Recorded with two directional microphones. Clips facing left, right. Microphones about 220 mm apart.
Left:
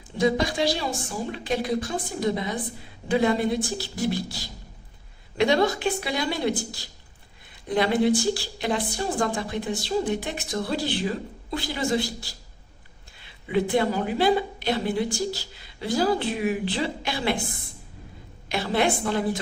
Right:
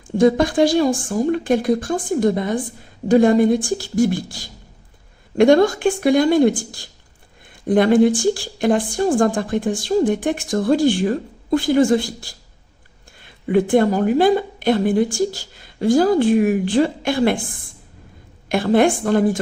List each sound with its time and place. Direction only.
0.2 s a woman's voice: 50° right (ahead or behind)
18.4 s a woman's voice: 50° right (ahead or behind)